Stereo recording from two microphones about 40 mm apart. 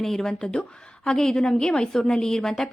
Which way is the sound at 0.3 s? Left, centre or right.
Left.